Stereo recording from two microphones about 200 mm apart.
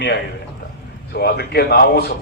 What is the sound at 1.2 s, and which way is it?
Speech, 55° left (ahead or behind).